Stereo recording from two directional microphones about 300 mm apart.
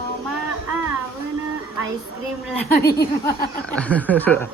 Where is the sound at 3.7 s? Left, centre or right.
Centre.